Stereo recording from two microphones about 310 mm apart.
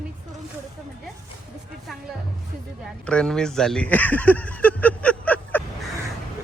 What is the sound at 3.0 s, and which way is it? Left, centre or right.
Speech, centre.